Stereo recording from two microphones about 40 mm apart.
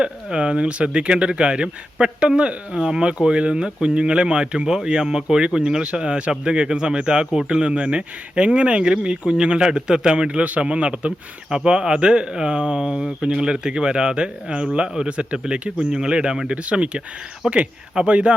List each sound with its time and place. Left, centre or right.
0.0 s speech: right
15.8 s speech: centre
16.5 s speech: right
17.4 s speech: centre
17.9 s speech: right